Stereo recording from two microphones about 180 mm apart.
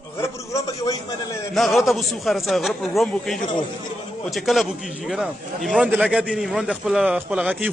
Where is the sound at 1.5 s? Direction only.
Centre (ahead or behind).